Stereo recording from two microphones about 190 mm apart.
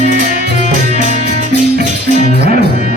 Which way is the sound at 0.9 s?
40° right (ahead or behind).